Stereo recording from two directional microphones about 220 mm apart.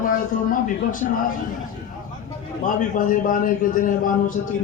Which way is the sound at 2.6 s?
35° left (ahead or behind).